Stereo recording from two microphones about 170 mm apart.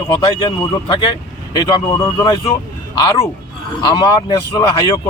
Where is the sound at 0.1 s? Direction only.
25° left (ahead or behind).